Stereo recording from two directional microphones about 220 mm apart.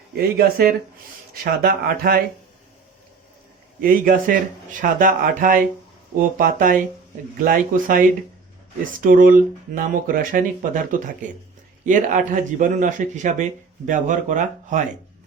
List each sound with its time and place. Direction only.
0.2 s speech: 45° right (ahead or behind)
3.8 s speech: 40° right (ahead or behind)